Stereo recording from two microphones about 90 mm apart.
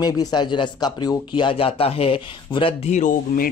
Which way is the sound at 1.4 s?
90° left.